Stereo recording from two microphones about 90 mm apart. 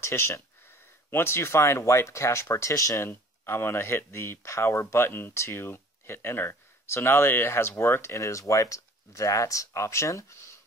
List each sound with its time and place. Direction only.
0.0 s speech: 30° left (ahead or behind)
3.1 s speech: 25° left (ahead or behind)